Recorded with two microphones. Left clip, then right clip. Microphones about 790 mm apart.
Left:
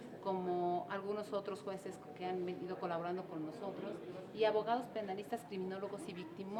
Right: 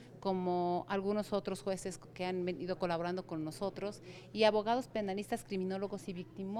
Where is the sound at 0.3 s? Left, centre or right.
Right.